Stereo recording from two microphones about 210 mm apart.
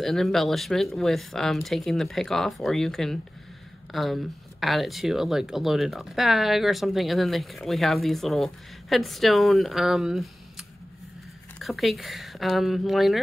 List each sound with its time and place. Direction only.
0.0 s speech: centre (ahead or behind)
11.6 s speech: centre (ahead or behind)